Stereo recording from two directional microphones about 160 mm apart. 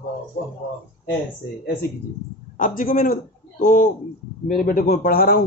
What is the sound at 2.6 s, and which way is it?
A man's voice, 60° left (ahead or behind).